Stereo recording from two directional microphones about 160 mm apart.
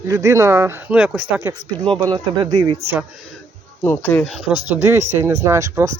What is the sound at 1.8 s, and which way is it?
Speech, 25° right (ahead or behind).